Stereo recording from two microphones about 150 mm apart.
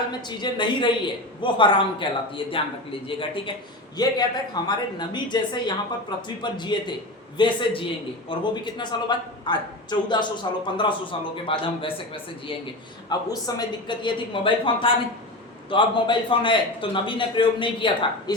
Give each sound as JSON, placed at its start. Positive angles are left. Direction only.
{"t": 0.3, "sound": "a woman's voice", "side_deg": 30}